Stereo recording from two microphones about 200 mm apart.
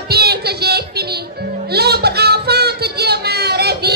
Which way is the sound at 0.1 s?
55° right (ahead or behind).